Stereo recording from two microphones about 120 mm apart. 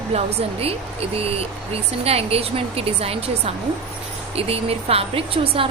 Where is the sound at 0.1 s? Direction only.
60° right (ahead or behind).